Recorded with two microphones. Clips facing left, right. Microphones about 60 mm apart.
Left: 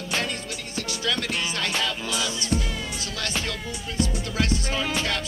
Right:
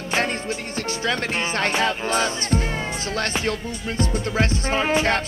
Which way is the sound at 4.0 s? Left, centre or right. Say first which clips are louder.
Right 3 dB; right.